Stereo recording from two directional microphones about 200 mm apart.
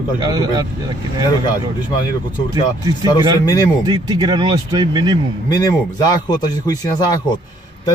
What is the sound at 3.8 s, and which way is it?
Speech, 20° right (ahead or behind).